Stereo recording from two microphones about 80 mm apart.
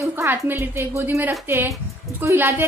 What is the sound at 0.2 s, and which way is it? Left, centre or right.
A woman's voice, right.